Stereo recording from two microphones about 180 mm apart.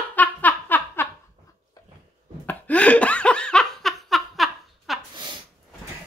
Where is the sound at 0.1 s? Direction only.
10° left (ahead or behind).